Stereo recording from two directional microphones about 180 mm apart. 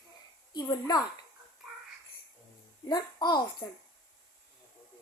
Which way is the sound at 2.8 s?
25° left (ahead or behind).